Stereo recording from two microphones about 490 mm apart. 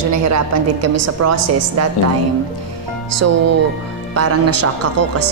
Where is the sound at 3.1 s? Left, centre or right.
Right.